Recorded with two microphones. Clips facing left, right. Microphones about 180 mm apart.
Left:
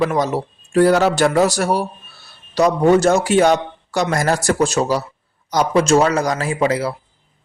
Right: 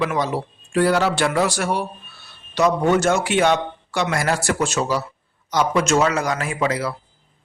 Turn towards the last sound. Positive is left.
turn(degrees=30)  # may be behind; listen again after turning